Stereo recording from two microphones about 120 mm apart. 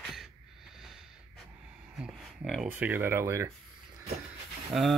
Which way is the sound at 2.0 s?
Centre (ahead or behind).